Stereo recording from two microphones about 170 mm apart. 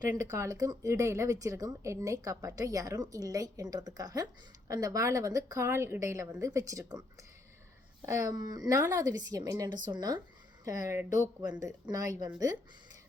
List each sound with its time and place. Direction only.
0.1 s a woman's voice: 15° right (ahead or behind)